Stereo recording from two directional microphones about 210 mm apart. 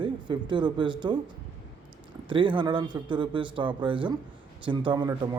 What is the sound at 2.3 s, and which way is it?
A man's voice, 25° right (ahead or behind).